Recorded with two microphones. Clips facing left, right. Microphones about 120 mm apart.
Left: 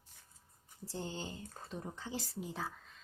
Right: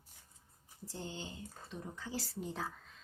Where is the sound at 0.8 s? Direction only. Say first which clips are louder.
Left 3 dB; 30° left (ahead or behind).